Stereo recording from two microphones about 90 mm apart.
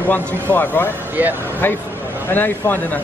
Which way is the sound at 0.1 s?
20° left (ahead or behind).